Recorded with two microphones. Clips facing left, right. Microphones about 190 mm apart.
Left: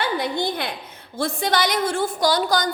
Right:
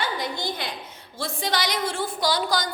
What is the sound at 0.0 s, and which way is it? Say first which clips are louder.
A woman's voice: left 5 dB; 60° left (ahead or behind).